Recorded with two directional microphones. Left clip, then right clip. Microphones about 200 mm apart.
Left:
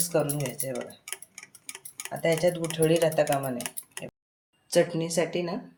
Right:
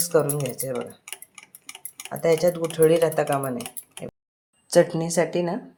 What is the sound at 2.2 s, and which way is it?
Speech, 30° right (ahead or behind).